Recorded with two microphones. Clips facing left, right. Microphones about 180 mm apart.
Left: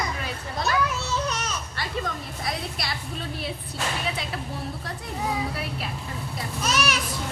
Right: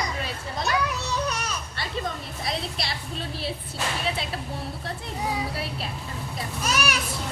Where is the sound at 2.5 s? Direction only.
25° right (ahead or behind).